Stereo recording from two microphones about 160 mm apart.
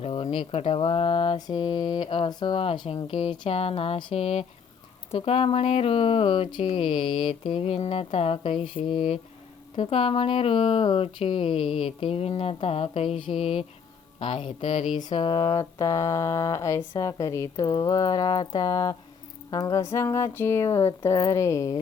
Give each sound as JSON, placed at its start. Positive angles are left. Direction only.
{"t": 0.0, "sound": "mantra", "side_deg": 35}
{"t": 15.1, "sound": "speech", "side_deg": 30}